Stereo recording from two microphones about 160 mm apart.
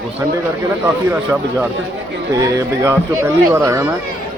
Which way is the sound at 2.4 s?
20° right (ahead or behind).